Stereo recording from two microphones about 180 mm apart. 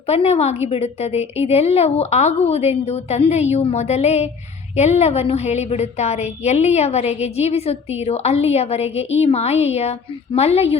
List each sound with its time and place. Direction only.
0.1 s a woman's voice: 35° left (ahead or behind)